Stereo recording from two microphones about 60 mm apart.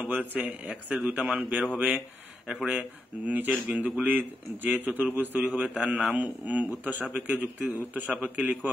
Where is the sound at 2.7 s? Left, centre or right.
Right.